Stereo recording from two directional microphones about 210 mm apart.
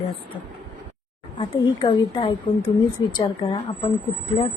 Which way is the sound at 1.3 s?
20° left (ahead or behind).